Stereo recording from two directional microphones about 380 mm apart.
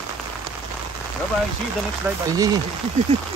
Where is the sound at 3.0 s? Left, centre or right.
Centre.